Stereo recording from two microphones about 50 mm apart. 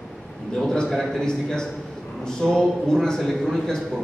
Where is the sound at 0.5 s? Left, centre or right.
Centre.